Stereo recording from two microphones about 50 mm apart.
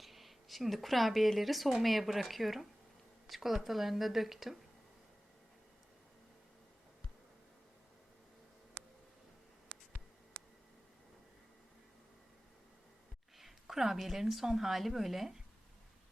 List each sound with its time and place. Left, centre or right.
0.0 s a woman's voice: centre
13.4 s a woman's voice: centre